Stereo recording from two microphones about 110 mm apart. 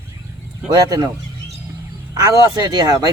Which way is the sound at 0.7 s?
35° right (ahead or behind).